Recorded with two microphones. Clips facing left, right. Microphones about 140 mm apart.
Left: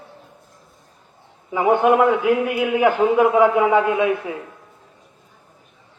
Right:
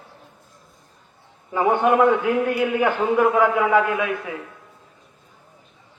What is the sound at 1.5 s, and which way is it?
A man's voice, 15° left (ahead or behind).